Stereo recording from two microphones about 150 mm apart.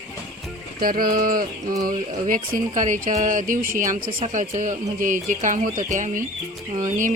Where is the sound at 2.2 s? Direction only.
60° right (ahead or behind).